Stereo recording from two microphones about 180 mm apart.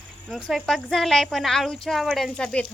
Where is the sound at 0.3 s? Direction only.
Centre (ahead or behind).